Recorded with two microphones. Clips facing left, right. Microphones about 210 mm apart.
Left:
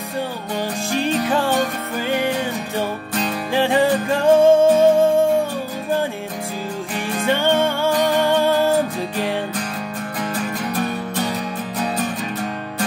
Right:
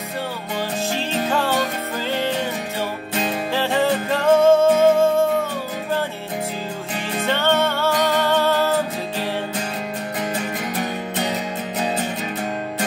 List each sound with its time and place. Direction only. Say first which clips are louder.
0.9 s music: left 5 dB; 15° left (ahead or behind)
3.5 s music: left 4 dB; 15° left (ahead or behind)
7.2 s music: left 2 dB; 15° left (ahead or behind)